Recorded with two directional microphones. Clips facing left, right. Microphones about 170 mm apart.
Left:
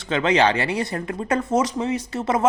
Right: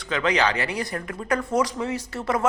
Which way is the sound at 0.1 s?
25° left (ahead or behind).